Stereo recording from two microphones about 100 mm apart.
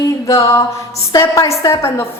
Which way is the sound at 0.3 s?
35° left (ahead or behind).